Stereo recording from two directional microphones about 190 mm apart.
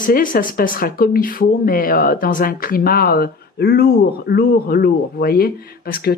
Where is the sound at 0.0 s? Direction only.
45° left (ahead or behind).